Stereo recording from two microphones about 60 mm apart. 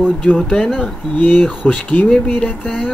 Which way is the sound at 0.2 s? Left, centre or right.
Centre.